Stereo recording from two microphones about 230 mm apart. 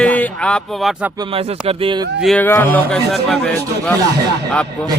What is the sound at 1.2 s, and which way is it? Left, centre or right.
Speech, right.